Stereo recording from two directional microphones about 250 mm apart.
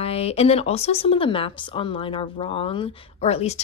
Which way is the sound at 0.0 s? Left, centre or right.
Left.